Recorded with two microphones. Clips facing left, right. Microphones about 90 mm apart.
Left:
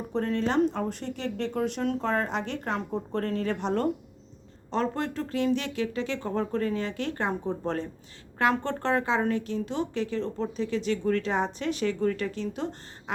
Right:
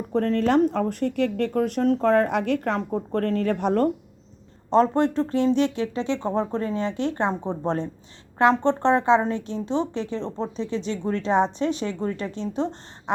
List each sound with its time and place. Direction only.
0.1 s speech: 50° right (ahead or behind)
4.7 s speech: 35° right (ahead or behind)